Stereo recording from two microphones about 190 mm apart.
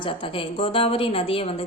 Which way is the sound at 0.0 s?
30° left (ahead or behind).